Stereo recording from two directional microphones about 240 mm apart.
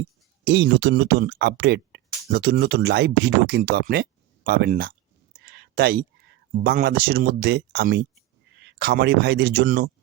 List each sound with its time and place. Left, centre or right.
0.4 s speech: right
5.4 s a sound: right
6.5 s speech: right